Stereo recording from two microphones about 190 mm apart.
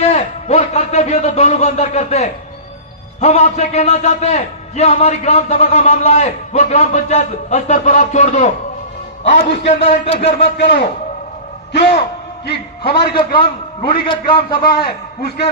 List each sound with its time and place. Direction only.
0.0 s a man's voice: 35° left (ahead or behind)
10.4 s a man's voice: 60° left (ahead or behind)
12.8 s a man's voice: 55° left (ahead or behind)
13.1 s a man's voice: 25° left (ahead or behind)
14.6 s a man's voice: 55° left (ahead or behind)